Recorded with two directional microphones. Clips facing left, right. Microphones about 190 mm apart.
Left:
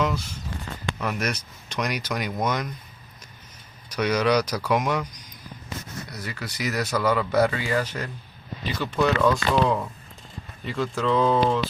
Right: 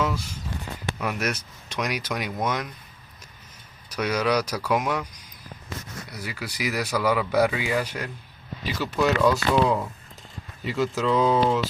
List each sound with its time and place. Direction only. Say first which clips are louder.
0.0 s speech: left 1 dB; 10° right (ahead or behind)
3.9 s speech: left 2 dB; 5° right (ahead or behind)